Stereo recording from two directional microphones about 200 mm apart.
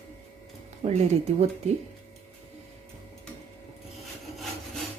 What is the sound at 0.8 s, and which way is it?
Speech, 35° right (ahead or behind).